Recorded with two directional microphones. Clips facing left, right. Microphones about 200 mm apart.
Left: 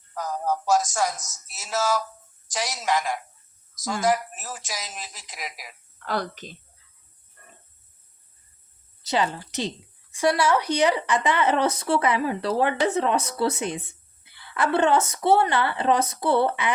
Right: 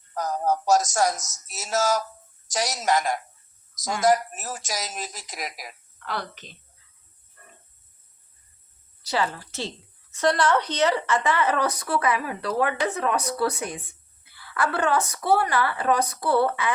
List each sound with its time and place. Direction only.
0.1 s speech: 40° right (ahead or behind)
6.1 s a woman's voice: 45° left (ahead or behind)
9.0 s a woman's voice: 20° left (ahead or behind)